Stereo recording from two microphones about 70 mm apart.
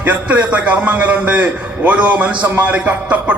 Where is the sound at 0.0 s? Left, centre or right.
Right.